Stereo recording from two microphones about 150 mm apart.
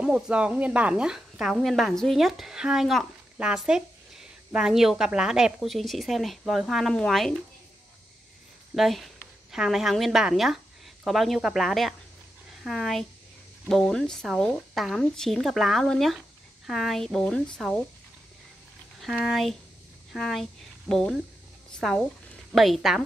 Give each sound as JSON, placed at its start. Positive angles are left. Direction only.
{"t": 0.0, "sound": "a woman's voice", "side_deg": -5}
{"t": 8.7, "sound": "a woman's voice", "side_deg": 0}
{"t": 18.9, "sound": "a woman's voice", "side_deg": 0}